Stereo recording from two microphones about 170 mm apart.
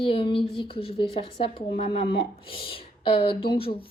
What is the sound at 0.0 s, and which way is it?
Speech, 30° left (ahead or behind).